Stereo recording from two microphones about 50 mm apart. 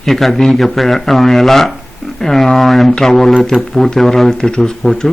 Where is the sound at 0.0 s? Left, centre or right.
Centre.